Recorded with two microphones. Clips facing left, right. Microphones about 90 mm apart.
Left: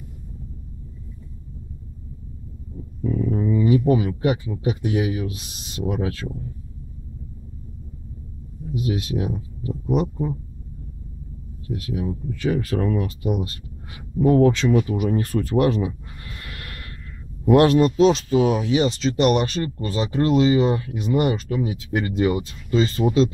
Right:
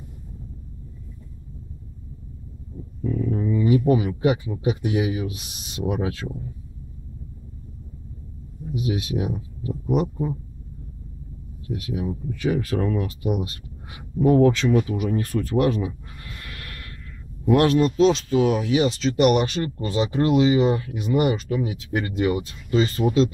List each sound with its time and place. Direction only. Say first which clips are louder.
3.0 s a sound: left 2 dB; 15° left (ahead or behind)
3.6 s speech: even; 5° right (ahead or behind)
8.7 s speech: left 1 dB; 10° right (ahead or behind)
11.7 s speech: left 1 dB; 15° right (ahead or behind)
13.4 s speech: left 1 dB; 15° right (ahead or behind)
14.1 s speech: left 1 dB; 5° right (ahead or behind)
15.0 s speech: left 2 dB; 15° left (ahead or behind)
16.4 s snort: left 2 dB; 15° left (ahead or behind)
17.6 s speech: left 3 dB; 10° left (ahead or behind)